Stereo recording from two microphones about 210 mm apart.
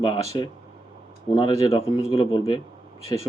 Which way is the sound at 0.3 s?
20° left (ahead or behind).